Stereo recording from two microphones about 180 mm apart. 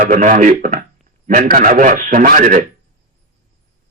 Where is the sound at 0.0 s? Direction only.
45° right (ahead or behind).